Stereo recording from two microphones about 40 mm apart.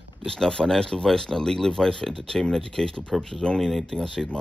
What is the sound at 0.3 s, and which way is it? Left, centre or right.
Speech, centre.